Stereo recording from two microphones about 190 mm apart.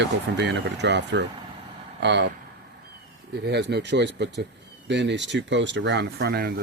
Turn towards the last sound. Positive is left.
turn(degrees=-55)  # may be behind; listen again after turning